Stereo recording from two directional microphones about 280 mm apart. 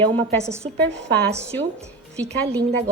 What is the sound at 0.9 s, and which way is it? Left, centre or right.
Speech, right.